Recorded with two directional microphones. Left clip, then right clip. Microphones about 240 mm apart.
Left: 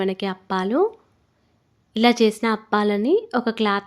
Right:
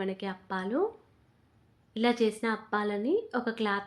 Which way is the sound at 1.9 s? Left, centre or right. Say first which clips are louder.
Left 10 dB; left.